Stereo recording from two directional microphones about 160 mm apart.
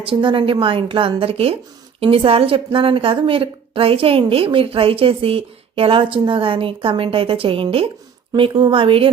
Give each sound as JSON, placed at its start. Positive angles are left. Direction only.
{"t": 0.0, "sound": "a woman's voice", "side_deg": -30}